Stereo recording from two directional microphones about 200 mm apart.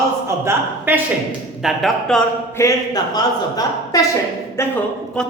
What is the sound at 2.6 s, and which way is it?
A woman's voice, 15° left (ahead or behind).